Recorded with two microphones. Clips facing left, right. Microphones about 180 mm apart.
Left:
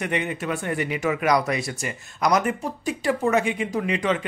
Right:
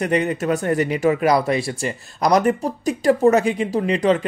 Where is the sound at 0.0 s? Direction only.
40° right (ahead or behind).